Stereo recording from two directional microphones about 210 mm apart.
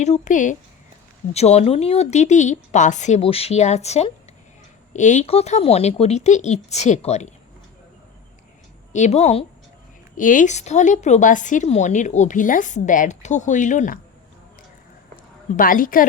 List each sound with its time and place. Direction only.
0.0 s speech: 35° left (ahead or behind)
8.9 s speech: 35° left (ahead or behind)
15.1 s a sound: 40° left (ahead or behind)